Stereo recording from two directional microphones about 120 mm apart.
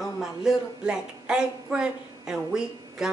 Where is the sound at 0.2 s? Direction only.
5° right (ahead or behind).